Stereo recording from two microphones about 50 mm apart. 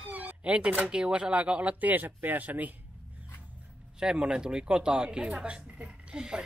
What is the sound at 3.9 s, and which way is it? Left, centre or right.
Speech, centre.